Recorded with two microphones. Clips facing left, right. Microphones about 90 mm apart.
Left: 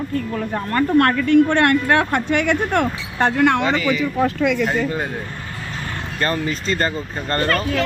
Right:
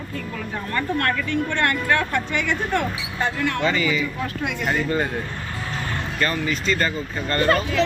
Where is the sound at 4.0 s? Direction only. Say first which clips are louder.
Left 8 dB; 80° left.